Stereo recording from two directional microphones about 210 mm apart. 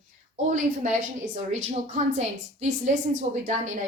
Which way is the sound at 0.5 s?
35° right (ahead or behind).